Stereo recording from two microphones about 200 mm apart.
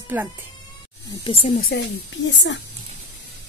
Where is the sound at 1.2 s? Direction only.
30° left (ahead or behind).